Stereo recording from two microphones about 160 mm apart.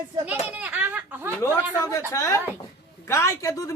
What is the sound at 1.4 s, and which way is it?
Speech, 20° left (ahead or behind).